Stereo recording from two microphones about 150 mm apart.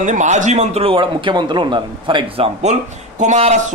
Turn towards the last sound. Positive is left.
turn(degrees=-50)  # may be behind; listen again after turning